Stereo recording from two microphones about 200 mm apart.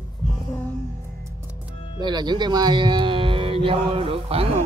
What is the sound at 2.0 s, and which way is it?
Speech, 20° right (ahead or behind).